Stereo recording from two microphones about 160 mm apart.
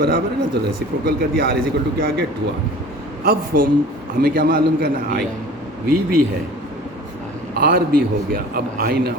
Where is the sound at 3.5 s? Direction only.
70° right (ahead or behind).